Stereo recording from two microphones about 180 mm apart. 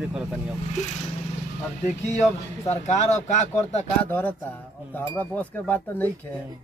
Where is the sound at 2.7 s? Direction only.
40° left (ahead or behind).